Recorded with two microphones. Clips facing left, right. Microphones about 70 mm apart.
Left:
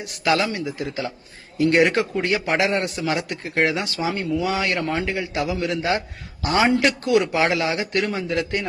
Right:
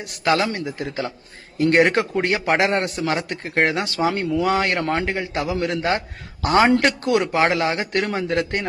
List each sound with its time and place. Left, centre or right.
0.0 s a man's voice: right
5.5 s a man's voice: right